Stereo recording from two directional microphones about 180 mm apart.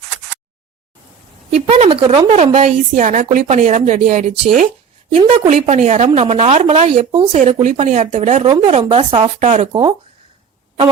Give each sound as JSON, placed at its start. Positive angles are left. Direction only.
{"t": 1.5, "sound": "a woman's voice", "side_deg": -35}